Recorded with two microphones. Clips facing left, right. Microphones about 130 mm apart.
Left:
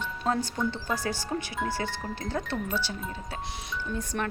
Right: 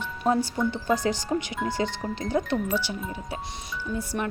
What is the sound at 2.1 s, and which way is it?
Speech, 15° right (ahead or behind).